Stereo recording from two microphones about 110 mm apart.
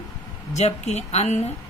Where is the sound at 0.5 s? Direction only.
90° left.